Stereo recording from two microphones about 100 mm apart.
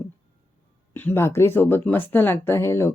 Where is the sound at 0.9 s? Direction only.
20° left (ahead or behind).